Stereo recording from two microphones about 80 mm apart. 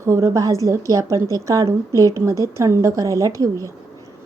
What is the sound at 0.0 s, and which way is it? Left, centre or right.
A woman's voice, right.